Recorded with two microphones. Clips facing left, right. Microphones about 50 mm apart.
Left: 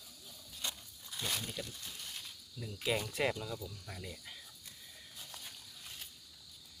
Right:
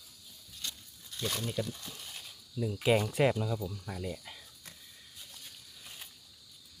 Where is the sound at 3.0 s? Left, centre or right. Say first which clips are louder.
Right 7 dB; centre.